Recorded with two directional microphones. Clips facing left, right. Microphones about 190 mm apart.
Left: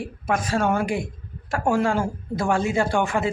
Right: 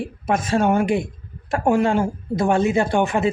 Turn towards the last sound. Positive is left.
turn(degrees=-20)  # may be behind; listen again after turning